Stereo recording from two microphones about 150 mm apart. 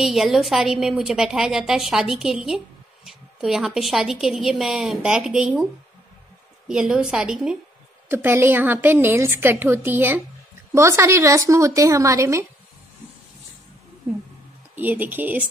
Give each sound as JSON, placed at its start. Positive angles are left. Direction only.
{"t": 0.0, "sound": "a woman's voice", "side_deg": 0}
{"t": 6.7, "sound": "a woman's voice", "side_deg": -5}
{"t": 14.0, "sound": "a woman's voice", "side_deg": -15}